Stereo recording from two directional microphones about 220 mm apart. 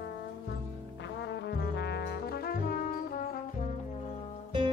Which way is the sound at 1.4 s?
50° left (ahead or behind).